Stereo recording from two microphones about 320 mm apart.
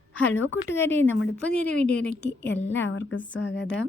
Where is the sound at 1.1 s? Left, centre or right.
Left.